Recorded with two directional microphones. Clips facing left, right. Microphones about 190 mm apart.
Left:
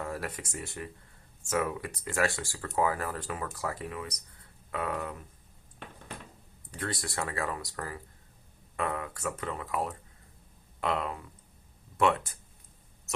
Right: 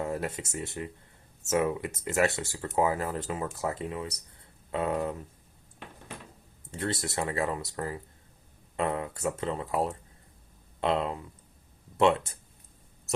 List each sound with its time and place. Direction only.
0.0 s speech: 20° right (ahead or behind)
6.7 s speech: 25° right (ahead or behind)